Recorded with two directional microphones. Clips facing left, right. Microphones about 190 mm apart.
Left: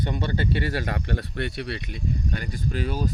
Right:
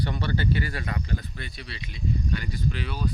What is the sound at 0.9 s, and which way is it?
Speech, 70° left (ahead or behind).